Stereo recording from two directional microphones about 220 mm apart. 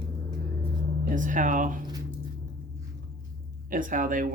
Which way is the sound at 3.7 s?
40° right (ahead or behind).